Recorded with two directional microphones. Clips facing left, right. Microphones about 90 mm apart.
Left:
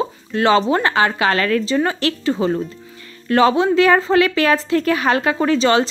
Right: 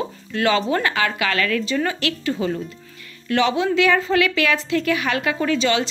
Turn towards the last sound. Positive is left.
turn(degrees=35)  # may be behind; listen again after turning